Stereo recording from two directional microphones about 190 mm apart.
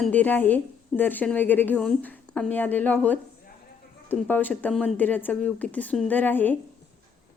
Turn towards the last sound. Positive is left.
turn(degrees=10)  # may be behind; listen again after turning